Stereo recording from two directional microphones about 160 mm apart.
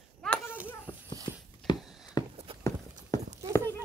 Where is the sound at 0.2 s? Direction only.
10° left (ahead or behind).